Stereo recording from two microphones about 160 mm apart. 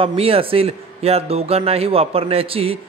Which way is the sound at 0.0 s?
35° right (ahead or behind).